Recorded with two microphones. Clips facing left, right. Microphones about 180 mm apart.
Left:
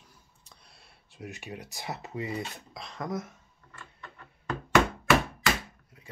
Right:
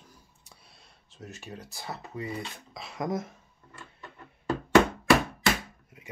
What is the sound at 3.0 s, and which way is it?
Speech, 25° right (ahead or behind).